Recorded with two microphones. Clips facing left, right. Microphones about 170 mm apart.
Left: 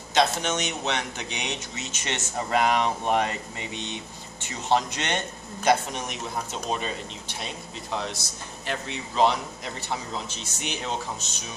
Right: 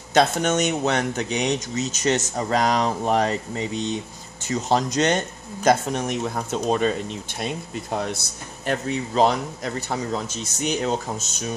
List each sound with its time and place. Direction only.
0.1 s speech: 50° right (ahead or behind)